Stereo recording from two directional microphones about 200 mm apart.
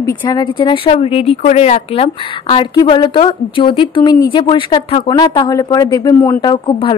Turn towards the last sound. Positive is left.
turn(degrees=25)  # may be behind; listen again after turning